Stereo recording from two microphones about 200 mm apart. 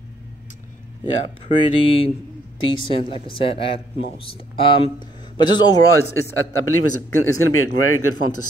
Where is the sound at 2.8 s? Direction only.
25° left (ahead or behind).